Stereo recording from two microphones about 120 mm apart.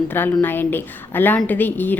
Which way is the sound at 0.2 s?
15° left (ahead or behind).